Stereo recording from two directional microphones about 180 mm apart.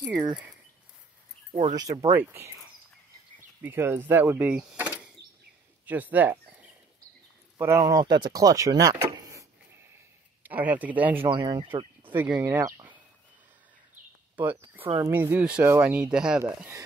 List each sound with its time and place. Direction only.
2.0 s speech: 15° right (ahead or behind)
3.6 s speech: 10° right (ahead or behind)
7.5 s speech: 15° right (ahead or behind)
11.2 s speech: 25° right (ahead or behind)
12.1 s speech: 10° right (ahead or behind)
14.3 s a sound: 10° right (ahead or behind)
14.8 s speech: 30° right (ahead or behind)
15.0 s speech: 15° right (ahead or behind)